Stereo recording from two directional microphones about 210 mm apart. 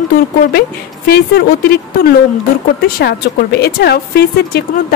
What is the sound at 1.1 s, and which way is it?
Speech, 50° left (ahead or behind).